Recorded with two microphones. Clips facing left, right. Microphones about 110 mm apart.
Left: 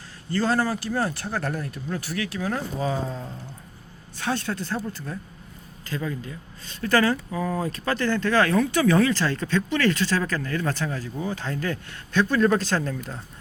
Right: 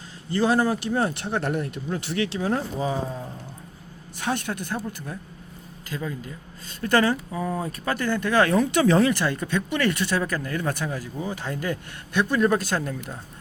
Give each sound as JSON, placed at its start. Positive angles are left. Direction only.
{"t": 0.3, "sound": "speech", "side_deg": -15}
{"t": 6.8, "sound": "speech", "side_deg": -20}